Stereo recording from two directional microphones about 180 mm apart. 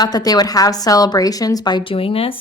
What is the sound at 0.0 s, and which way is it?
Speech, 20° left (ahead or behind).